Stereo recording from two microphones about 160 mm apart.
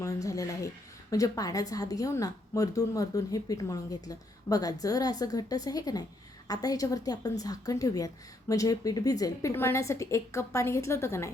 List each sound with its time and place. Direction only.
0.0 s a woman's voice: 20° left (ahead or behind)